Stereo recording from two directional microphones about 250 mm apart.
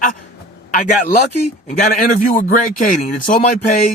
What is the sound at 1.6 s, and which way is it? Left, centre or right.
A man's voice, left.